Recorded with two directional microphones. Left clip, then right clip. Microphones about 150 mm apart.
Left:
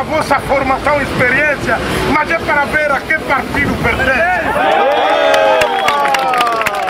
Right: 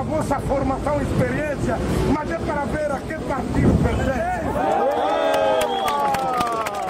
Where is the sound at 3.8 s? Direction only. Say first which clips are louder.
Left 11 dB; 20° left (ahead or behind).